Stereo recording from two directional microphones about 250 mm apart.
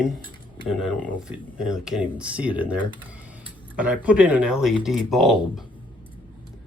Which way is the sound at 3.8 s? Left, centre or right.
Centre.